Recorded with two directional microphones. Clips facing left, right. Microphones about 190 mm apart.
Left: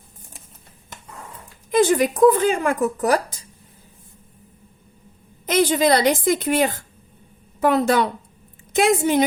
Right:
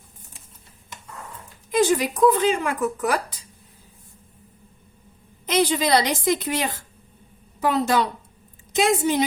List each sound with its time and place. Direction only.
1.8 s a woman's voice: 55° left (ahead or behind)
2.8 s speech: 40° left (ahead or behind)
5.5 s a woman's voice: 50° left (ahead or behind)